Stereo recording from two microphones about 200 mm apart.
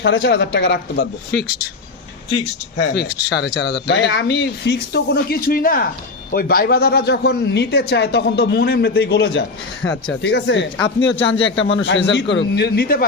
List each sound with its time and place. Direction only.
0.0 s speech: 65° left (ahead or behind)